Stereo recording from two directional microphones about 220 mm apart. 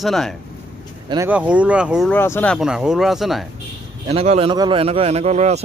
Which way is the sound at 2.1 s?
10° left (ahead or behind).